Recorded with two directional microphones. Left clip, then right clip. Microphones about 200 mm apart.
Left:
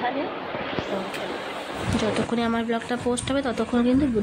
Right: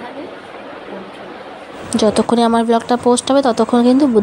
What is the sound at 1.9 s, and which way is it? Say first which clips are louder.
Speech: right 12 dB; 30° right (ahead or behind).